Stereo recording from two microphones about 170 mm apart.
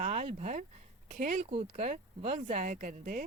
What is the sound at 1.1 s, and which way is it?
Speech, 50° right (ahead or behind).